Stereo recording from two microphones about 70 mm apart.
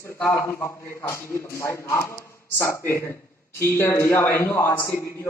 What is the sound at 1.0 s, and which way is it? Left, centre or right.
A man's voice, left.